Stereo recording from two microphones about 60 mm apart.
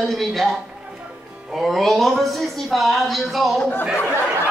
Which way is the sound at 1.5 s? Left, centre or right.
Centre.